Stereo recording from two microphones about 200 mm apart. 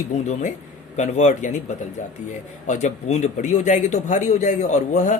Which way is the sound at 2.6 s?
35° left (ahead or behind).